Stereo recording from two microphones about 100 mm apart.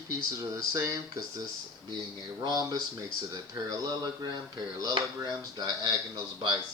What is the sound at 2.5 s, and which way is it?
Speech, 30° right (ahead or behind).